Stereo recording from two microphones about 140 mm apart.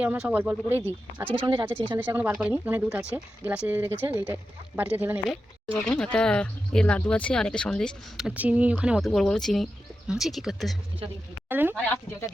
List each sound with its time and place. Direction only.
0.0 s speech: 10° right (ahead or behind)
1.4 s speech: 35° right (ahead or behind)
2.0 s speech: 15° right (ahead or behind)
5.7 s speech: 5° left (ahead or behind)
9.0 s speech: 5° left (ahead or behind)
11.4 s speech: 15° right (ahead or behind)